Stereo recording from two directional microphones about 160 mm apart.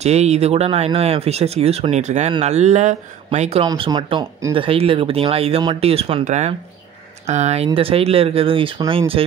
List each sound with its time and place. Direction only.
0.0 s speech: 40° right (ahead or behind)